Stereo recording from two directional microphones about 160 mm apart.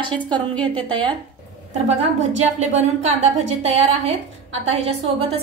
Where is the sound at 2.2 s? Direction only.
45° right (ahead or behind).